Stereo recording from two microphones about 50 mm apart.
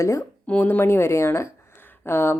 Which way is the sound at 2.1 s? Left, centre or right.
Left.